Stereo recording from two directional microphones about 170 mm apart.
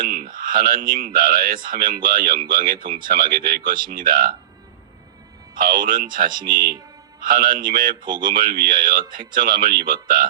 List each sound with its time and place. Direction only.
0.0 s speech: 60° right (ahead or behind)
5.5 s speech: 55° right (ahead or behind)